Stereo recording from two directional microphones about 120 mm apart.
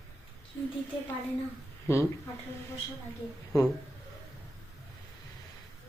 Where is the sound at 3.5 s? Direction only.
30° left (ahead or behind).